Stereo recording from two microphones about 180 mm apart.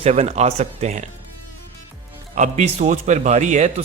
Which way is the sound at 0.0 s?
35° right (ahead or behind).